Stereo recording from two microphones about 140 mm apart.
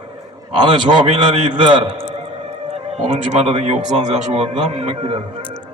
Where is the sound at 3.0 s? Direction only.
45° right (ahead or behind).